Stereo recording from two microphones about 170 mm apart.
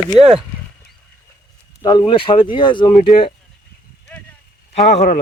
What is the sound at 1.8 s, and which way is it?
Speech, 25° left (ahead or behind).